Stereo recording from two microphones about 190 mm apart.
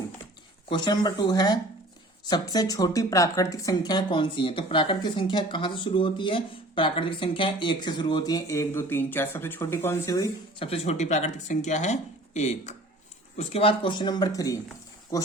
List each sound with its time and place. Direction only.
0.7 s speech: 20° left (ahead or behind)
10.7 s speech: 35° left (ahead or behind); by 14.6 s 20° left (ahead or behind)